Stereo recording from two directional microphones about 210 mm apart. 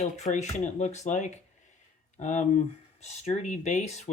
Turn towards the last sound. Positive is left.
turn(degrees=30)  # may be behind; listen again after turning